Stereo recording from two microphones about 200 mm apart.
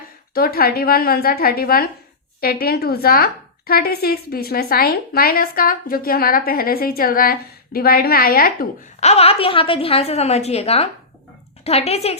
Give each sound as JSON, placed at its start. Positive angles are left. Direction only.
{"t": 0.3, "sound": "a woman's voice", "side_deg": 50}
{"t": 9.0, "sound": "a woman's voice", "side_deg": 30}